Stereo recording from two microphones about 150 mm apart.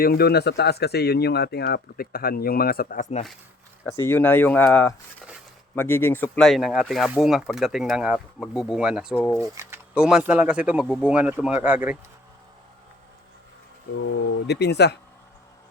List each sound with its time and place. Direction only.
0.0 s speech: 90° left; by 3.1 s 70° left (ahead or behind)
3.8 s speech: 15° left (ahead or behind); by 9.1 s 5° right (ahead or behind)
9.1 s speech: 5° left (ahead or behind)
9.6 s a sound: 20° right (ahead or behind)
9.9 s speech: 5° right (ahead or behind)
14.4 s speech: 90° left